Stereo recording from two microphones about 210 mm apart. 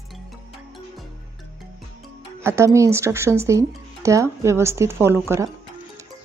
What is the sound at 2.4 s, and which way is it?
Speech, 15° right (ahead or behind).